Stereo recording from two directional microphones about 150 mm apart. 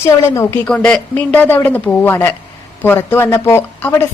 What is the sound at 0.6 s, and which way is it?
A woman's voice, 10° left (ahead or behind).